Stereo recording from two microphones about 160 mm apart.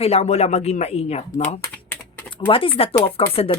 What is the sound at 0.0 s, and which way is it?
Speech, 40° left (ahead or behind).